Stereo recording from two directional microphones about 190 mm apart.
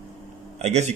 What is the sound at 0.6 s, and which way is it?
Speech, 35° right (ahead or behind).